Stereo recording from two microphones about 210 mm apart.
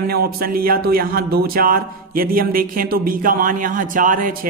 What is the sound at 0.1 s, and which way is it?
A man's voice, 45° right (ahead or behind).